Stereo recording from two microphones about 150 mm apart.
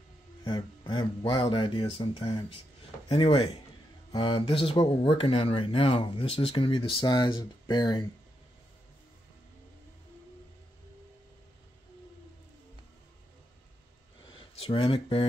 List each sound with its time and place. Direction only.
0.4 s speech: 30° left (ahead or behind)
14.5 s speech: 40° left (ahead or behind)